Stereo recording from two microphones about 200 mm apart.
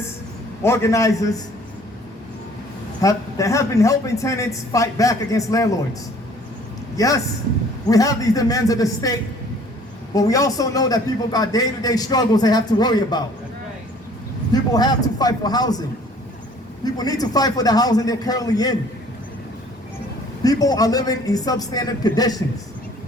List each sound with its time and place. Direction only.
0.6 s a man's voice: 15° left (ahead or behind)
3.0 s a man's voice: 15° left (ahead or behind)
6.9 s a man's voice: 15° left (ahead or behind)
14.5 s a man's voice: 20° left (ahead or behind)
16.8 s a man's voice: 20° left (ahead or behind)
20.4 s a man's voice: 20° left (ahead or behind)